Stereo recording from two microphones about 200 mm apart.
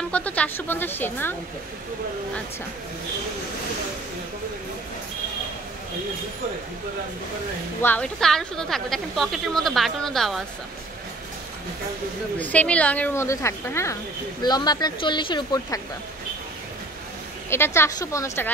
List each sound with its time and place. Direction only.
0.1 s a woman's voice: 5° left (ahead or behind)
7.8 s a woman's voice: 5° left (ahead or behind)
12.4 s a woman's voice: 5° left (ahead or behind)
17.5 s a woman's voice: 10° left (ahead or behind)